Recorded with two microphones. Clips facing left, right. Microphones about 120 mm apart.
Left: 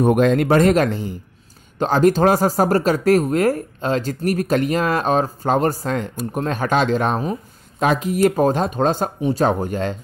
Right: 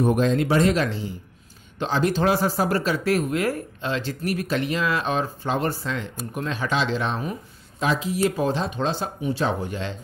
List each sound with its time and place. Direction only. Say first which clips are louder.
0.0 s speech: left 5 dB; 65° left (ahead or behind); by 9.9 s 45° left (ahead or behind)